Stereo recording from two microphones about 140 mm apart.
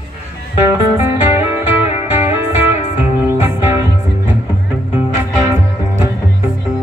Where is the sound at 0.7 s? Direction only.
15° right (ahead or behind).